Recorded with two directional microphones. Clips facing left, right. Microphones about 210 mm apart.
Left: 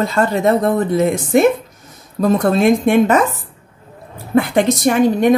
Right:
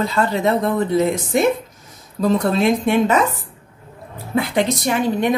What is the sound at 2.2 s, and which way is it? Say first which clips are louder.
Speech: left 3 dB; 50° left (ahead or behind).